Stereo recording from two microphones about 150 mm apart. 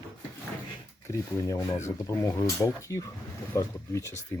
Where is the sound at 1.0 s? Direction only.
20° left (ahead or behind).